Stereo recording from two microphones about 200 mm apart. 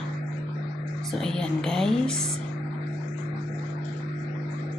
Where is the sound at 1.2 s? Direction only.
5° left (ahead or behind).